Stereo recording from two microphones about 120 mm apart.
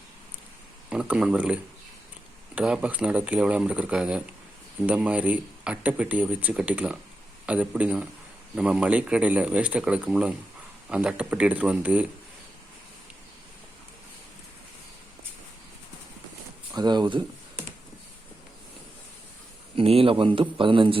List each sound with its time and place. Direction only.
0.9 s a man's voice: 10° right (ahead or behind)
2.6 s a man's voice: 10° right (ahead or behind)
16.7 s speech: 35° right (ahead or behind)
19.7 s a man's voice: 55° right (ahead or behind)